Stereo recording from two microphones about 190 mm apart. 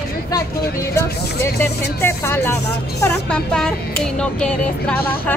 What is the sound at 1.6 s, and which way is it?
Speech, 10° left (ahead or behind).